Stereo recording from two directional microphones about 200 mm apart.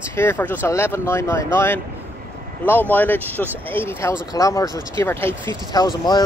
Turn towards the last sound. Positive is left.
turn(degrees=20)  # may be behind; listen again after turning